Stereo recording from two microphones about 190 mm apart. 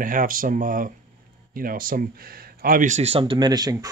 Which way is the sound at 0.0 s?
45° right (ahead or behind).